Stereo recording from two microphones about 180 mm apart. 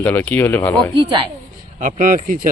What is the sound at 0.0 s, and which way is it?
Speech, 10° left (ahead or behind).